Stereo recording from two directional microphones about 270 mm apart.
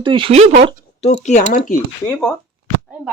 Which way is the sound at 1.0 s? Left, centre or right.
Left.